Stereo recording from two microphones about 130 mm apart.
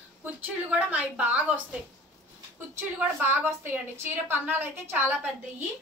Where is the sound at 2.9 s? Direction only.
15° right (ahead or behind).